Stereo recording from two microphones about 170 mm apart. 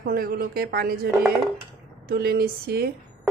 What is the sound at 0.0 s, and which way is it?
Speech, 60° right (ahead or behind).